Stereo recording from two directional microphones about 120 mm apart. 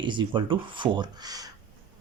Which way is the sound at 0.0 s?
40° right (ahead or behind).